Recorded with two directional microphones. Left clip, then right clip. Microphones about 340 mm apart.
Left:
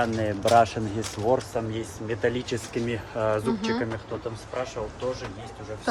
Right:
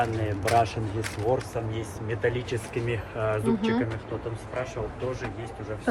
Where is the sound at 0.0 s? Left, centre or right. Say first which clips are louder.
Left 2 dB; left.